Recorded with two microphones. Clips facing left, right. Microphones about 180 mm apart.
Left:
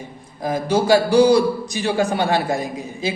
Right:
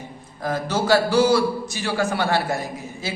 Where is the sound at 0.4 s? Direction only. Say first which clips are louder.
Left 4 dB; 10° left (ahead or behind).